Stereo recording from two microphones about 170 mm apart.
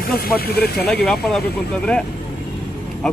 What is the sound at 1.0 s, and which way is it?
Speech, centre (ahead or behind).